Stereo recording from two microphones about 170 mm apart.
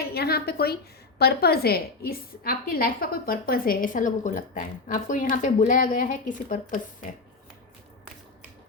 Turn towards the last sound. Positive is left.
turn(degrees=50)  # may be behind; listen again after turning